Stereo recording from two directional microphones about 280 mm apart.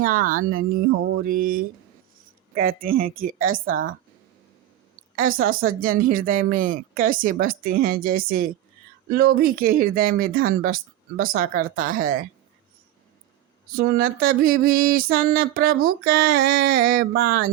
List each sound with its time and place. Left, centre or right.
0.0 s speech: right
5.1 s speech: right
13.7 s speech: right